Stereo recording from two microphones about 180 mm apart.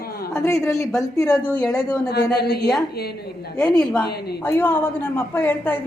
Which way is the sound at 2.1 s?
65° left (ahead or behind).